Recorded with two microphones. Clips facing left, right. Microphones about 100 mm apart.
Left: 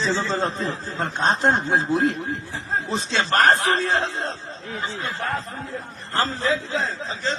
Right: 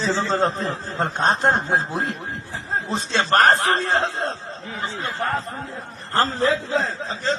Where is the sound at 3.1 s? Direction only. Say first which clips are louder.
Right 2 dB; 45° right (ahead or behind).